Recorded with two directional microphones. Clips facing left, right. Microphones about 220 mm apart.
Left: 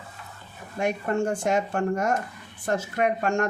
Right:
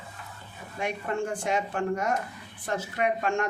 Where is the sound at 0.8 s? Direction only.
45° left (ahead or behind).